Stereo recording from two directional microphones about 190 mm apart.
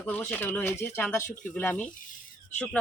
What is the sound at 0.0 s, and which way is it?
Speech, 5° left (ahead or behind).